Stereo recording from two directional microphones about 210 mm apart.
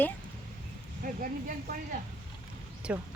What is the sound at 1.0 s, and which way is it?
Speech, 40° right (ahead or behind).